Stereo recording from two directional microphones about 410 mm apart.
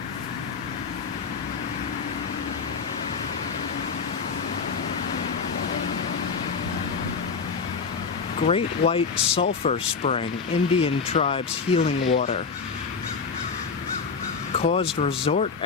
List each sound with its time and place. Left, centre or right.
8.4 s speech: centre
14.6 s speech: centre